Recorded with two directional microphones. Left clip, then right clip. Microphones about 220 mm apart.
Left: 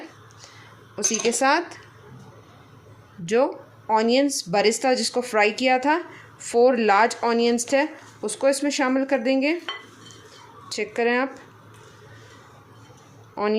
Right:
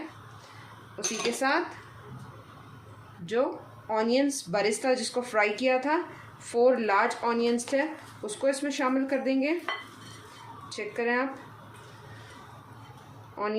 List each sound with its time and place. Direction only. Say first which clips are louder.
0.9 s speech: left 7 dB; 45° left (ahead or behind)
3.8 s speech: left 6 dB; 40° left (ahead or behind)
10.7 s speech: left 7 dB; 45° left (ahead or behind)
13.3 s speech: left 7 dB; 40° left (ahead or behind)